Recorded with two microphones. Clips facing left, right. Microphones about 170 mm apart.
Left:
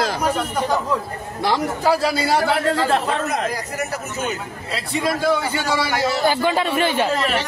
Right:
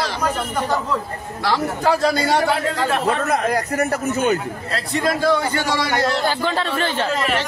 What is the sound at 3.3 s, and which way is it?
Speech, 60° right (ahead or behind).